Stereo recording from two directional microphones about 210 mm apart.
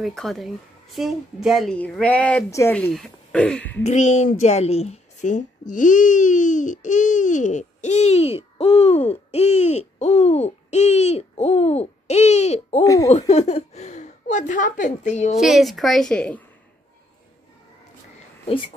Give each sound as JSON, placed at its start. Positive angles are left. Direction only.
{"t": 0.0, "sound": "a woman's voice", "side_deg": 0}
{"t": 3.8, "sound": "a woman's voice", "side_deg": 35}
{"t": 8.5, "sound": "hoot", "side_deg": 30}
{"t": 12.8, "sound": "a woman's voice", "side_deg": 15}
{"t": 13.3, "sound": "a woman's voice", "side_deg": 30}
{"t": 15.4, "sound": "a woman's voice", "side_deg": 0}